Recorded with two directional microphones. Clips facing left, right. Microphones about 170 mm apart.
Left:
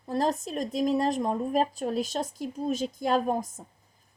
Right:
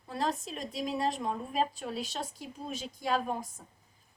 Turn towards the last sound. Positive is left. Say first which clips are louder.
# left 6 dB
turn(degrees=45)  # may be behind; listen again after turning